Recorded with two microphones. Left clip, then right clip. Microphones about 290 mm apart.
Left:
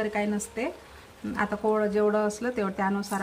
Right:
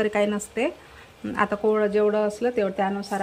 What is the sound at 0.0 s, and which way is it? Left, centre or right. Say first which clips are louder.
Speech: right 6 dB; centre.